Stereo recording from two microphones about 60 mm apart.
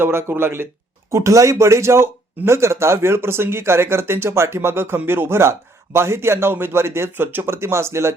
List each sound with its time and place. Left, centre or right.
0.0 s speech: right
1.1 s speech: right